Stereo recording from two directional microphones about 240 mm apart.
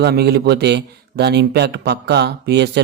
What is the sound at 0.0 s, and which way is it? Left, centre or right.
A man's voice, right.